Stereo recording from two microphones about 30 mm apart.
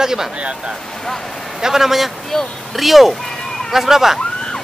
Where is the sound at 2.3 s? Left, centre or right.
Left.